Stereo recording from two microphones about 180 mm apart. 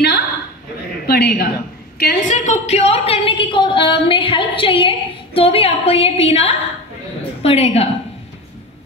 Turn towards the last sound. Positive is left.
turn(degrees=35)  # may be behind; listen again after turning